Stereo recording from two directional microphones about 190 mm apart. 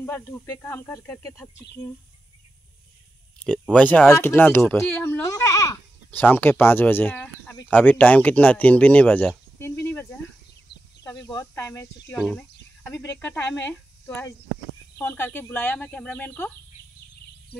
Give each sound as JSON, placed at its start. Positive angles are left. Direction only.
{"t": 0.0, "sound": "speech", "side_deg": 15}
{"t": 3.7, "sound": "speech", "side_deg": 5}
{"t": 9.6, "sound": "cricket", "side_deg": 10}
{"t": 10.7, "sound": "chicken", "side_deg": 60}
{"t": 11.2, "sound": "speech", "side_deg": 15}
{"t": 12.2, "sound": "speech", "side_deg": 5}
{"t": 12.8, "sound": "speech", "side_deg": 15}